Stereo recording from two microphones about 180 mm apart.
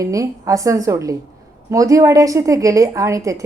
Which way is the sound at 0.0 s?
20° right (ahead or behind).